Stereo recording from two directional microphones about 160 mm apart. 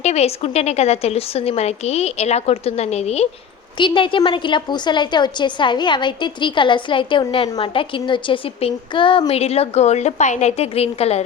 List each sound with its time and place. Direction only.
0.0 s a woman's voice: 40° left (ahead or behind)
3.8 s a woman's voice: 30° left (ahead or behind)